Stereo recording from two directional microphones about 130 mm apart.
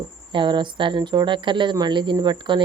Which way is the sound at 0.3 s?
35° right (ahead or behind).